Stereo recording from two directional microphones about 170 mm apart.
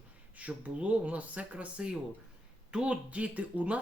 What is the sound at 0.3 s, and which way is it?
Speech, 10° right (ahead or behind).